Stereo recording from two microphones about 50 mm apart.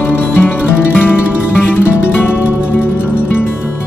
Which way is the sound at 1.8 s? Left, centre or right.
Left.